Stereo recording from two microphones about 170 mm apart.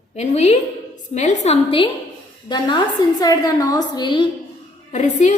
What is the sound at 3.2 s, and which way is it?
A woman's voice, 20° left (ahead or behind).